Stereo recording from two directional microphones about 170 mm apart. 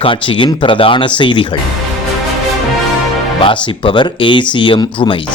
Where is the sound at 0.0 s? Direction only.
30° left (ahead or behind).